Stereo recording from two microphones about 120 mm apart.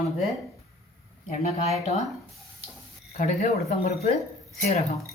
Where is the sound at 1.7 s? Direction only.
70° left (ahead or behind).